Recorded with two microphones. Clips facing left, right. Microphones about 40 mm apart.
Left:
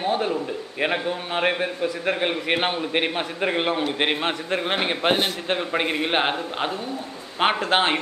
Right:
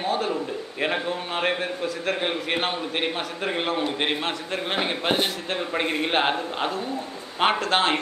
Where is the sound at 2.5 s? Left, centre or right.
Left.